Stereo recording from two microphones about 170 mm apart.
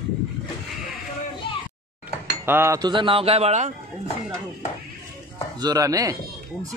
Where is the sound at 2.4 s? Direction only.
15° right (ahead or behind); by 3.7 s 40° right (ahead or behind).